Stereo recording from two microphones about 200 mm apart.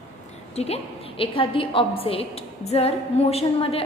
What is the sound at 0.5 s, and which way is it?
A woman's voice, 30° left (ahead or behind).